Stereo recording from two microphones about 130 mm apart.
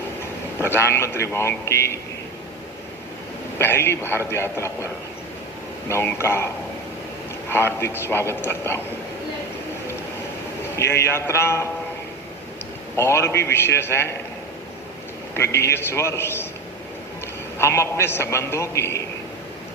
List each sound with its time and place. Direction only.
0.6 s a man's voice: 20° left (ahead or behind)
3.6 s a man's voice: 20° left (ahead or behind)
5.9 s a man's voice: 20° left (ahead or behind)
7.5 s a man's voice: 20° left (ahead or behind)
10.8 s a man's voice: 20° left (ahead or behind)
13.0 s a man's voice: 20° left (ahead or behind)
15.4 s a man's voice: 20° left (ahead or behind)
17.6 s a man's voice: 20° left (ahead or behind)